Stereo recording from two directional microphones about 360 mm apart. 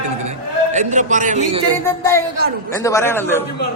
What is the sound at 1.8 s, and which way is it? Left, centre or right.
A man's voice, centre.